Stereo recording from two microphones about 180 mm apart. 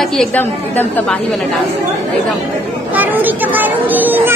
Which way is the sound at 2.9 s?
10° right (ahead or behind).